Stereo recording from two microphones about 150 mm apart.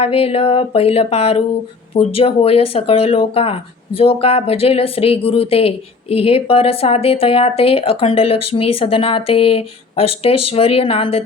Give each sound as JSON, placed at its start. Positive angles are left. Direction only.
{"t": 0.0, "sound": "speech", "side_deg": 40}